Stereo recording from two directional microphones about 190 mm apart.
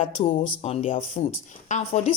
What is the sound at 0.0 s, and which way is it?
Speech, 35° left (ahead or behind).